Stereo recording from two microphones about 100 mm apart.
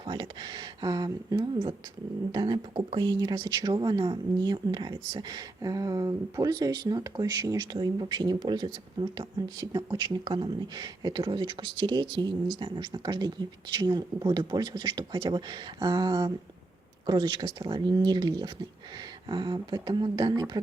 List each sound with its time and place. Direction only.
0.0 s speech: 45° right (ahead or behind)